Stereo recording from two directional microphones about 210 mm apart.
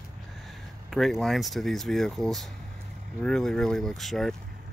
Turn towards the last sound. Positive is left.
turn(degrees=0)  # may be behind; listen again after turning